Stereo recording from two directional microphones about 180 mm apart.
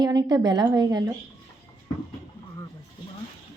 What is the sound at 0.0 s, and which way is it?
A woman's voice, 20° right (ahead or behind).